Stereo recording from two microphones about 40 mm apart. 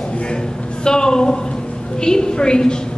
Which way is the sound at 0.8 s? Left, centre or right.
Centre.